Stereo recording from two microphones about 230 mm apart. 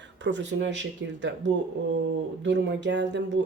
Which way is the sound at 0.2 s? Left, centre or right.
Right.